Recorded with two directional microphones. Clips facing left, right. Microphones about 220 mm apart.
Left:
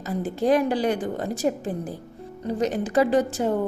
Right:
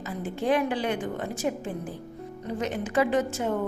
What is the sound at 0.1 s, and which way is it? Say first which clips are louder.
A woman's voice: left 5 dB; 40° left (ahead or behind).